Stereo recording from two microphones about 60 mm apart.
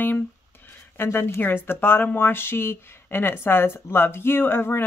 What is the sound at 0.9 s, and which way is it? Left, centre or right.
Speech, left.